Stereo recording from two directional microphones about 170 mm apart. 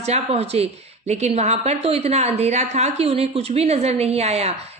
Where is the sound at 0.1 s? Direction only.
40° right (ahead or behind).